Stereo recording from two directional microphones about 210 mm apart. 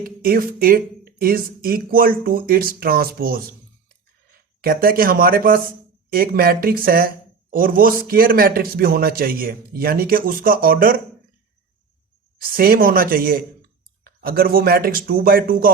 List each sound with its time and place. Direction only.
0.0 s speech: 45° right (ahead or behind)
4.6 s speech: 45° right (ahead or behind)
12.4 s speech: 45° right (ahead or behind)